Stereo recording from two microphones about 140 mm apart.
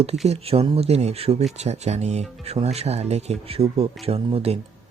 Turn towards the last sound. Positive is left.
turn(degrees=-45)  # may be behind; listen again after turning